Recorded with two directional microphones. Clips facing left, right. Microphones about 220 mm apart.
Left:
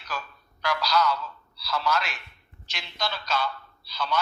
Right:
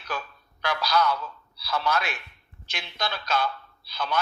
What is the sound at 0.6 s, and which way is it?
A man's voice, 55° right (ahead or behind).